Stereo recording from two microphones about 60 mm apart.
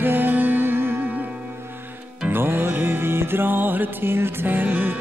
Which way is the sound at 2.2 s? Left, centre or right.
Right.